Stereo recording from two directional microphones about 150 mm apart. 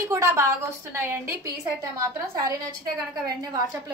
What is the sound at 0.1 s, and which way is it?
A woman's voice, 20° right (ahead or behind).